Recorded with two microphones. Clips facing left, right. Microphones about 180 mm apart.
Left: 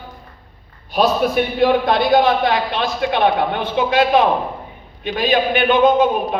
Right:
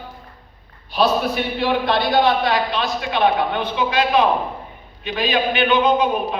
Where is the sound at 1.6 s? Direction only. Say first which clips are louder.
Left 4 dB; 50° left (ahead or behind).